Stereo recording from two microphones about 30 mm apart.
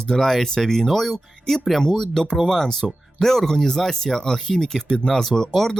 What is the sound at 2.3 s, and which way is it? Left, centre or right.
Speech, centre.